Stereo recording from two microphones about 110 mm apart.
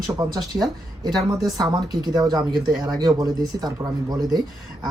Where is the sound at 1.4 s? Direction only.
35° right (ahead or behind).